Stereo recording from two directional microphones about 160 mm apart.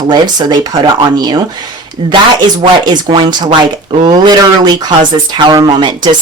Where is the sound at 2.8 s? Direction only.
25° right (ahead or behind).